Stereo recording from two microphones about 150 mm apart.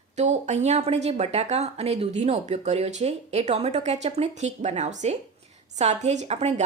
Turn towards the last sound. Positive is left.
turn(degrees=-45)  # may be behind; listen again after turning